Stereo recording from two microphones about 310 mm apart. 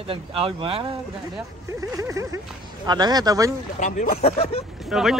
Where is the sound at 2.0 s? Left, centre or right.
Centre.